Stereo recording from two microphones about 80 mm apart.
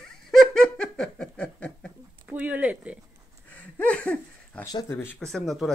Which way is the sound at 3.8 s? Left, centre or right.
Centre.